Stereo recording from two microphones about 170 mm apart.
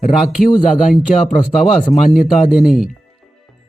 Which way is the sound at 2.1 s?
5° right (ahead or behind).